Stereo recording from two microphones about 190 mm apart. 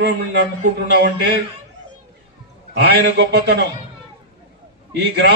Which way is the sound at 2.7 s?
60° right (ahead or behind).